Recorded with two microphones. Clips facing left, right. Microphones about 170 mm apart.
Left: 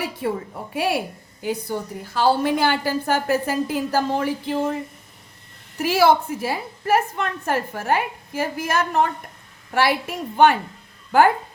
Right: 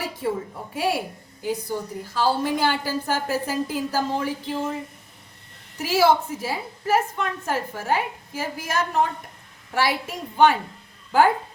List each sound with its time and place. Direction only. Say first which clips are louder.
0.2 s a woman's voice: right 1 dB; 65° left (ahead or behind)
5.8 s a woman's voice: left 2 dB; 60° left (ahead or behind)